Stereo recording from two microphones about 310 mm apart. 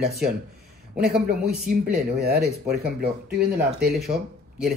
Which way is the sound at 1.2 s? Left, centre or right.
Right.